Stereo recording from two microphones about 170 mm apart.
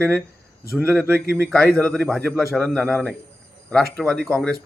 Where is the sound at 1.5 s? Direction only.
5° left (ahead or behind).